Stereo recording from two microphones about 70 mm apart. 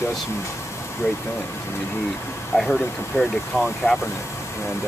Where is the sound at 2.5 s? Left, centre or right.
Left.